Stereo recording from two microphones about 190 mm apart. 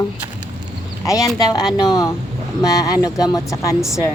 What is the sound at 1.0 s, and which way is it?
A woman's voice, 20° left (ahead or behind).